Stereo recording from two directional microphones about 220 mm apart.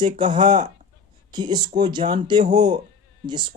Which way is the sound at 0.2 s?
35° right (ahead or behind).